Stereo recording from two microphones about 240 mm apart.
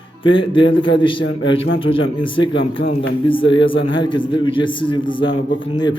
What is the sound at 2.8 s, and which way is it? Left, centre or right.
Speech, left.